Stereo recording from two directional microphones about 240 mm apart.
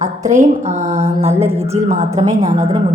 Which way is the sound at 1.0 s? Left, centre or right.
Right.